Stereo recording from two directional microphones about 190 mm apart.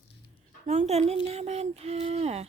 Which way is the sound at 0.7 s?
35° right (ahead or behind).